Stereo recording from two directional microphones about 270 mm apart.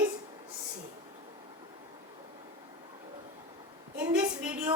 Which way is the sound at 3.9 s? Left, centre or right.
Centre.